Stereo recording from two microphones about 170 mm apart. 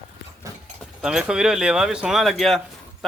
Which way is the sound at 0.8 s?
5° right (ahead or behind).